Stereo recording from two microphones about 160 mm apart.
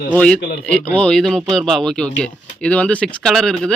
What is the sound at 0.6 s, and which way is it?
Speech, 10° left (ahead or behind).